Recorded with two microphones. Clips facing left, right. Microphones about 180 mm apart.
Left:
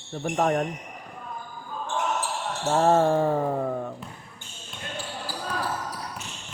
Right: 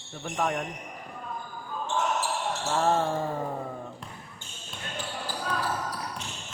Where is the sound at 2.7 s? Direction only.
45° left (ahead or behind).